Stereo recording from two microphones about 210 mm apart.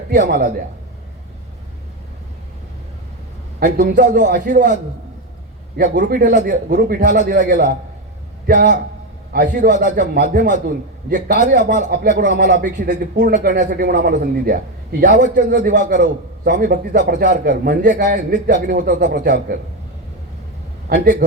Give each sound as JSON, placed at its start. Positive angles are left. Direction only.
{"t": 0.1, "sound": "speech", "side_deg": -45}
{"t": 3.6, "sound": "speech", "side_deg": -50}
{"t": 20.9, "sound": "speech", "side_deg": -45}